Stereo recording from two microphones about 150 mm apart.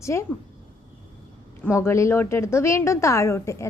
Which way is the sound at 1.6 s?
20° left (ahead or behind).